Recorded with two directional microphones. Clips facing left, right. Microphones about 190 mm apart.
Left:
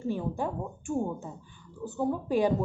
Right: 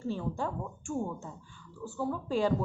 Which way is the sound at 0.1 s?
15° left (ahead or behind).